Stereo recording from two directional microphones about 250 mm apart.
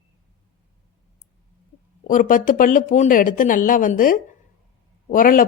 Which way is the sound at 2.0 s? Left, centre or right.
Left.